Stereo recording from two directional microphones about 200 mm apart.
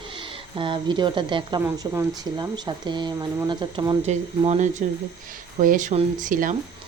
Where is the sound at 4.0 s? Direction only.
35° right (ahead or behind).